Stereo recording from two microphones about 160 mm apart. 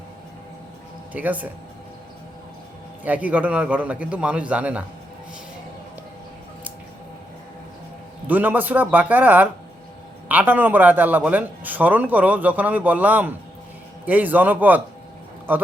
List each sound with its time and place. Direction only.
1.1 s a man's voice: 10° right (ahead or behind)
3.0 s a man's voice: 10° right (ahead or behind)
8.3 s a man's voice: 10° right (ahead or behind)